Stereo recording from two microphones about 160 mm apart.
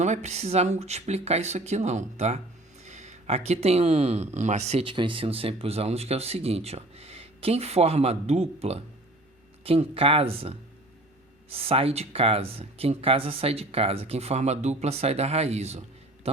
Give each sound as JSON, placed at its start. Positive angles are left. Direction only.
{"t": 0.0, "sound": "speech", "side_deg": -45}